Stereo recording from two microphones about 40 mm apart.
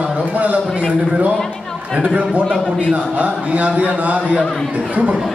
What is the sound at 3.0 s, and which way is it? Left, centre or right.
A man's voice, right.